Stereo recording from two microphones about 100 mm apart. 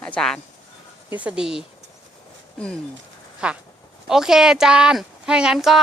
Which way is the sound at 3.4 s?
10° right (ahead or behind).